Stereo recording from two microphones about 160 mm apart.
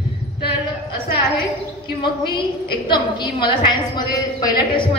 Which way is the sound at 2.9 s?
30° left (ahead or behind).